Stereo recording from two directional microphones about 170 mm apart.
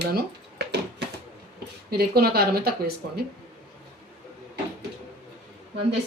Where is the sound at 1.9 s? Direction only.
65° right (ahead or behind).